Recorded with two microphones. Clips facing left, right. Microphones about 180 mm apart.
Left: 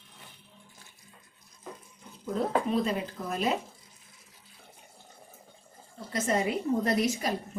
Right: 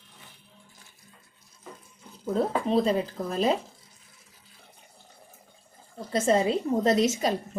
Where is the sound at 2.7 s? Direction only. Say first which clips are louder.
Right 5 dB; 30° right (ahead or behind).